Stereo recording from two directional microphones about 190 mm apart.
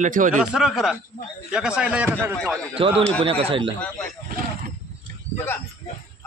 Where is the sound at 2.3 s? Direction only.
5° left (ahead or behind).